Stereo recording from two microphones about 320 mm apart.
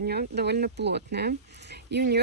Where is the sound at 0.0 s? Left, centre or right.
Right.